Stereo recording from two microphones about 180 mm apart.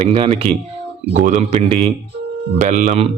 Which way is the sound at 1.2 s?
45° right (ahead or behind).